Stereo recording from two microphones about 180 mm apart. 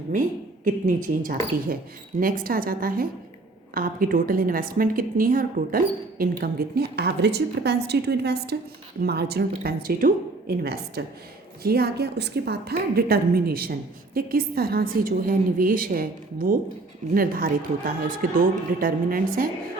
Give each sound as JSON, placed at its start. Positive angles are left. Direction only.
{"t": 0.1, "sound": "a woman's voice", "side_deg": -45}